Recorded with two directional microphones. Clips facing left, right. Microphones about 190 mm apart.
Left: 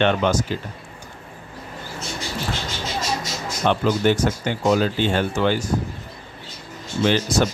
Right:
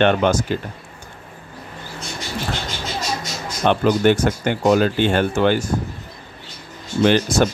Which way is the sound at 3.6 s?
60° right (ahead or behind).